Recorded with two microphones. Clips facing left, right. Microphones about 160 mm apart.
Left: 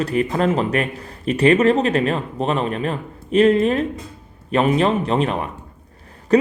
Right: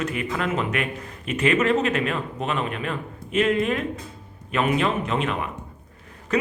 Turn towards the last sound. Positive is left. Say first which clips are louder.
# left 8 dB
turn(degrees=35)  # may be behind; listen again after turning